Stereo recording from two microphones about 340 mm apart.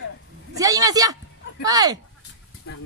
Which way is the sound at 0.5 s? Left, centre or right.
Centre.